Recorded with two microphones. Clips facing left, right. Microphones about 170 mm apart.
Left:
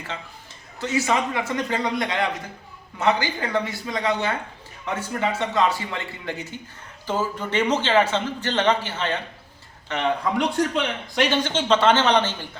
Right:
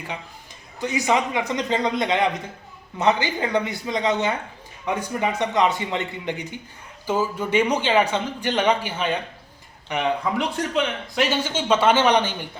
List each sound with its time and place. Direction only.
0.8 s a man's voice: 15° right (ahead or behind)